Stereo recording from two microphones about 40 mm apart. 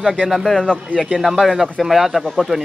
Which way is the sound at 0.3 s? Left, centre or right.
Centre.